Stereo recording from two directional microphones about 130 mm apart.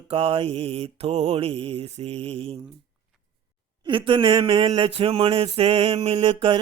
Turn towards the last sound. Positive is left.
turn(degrees=-45)  # may be behind; listen again after turning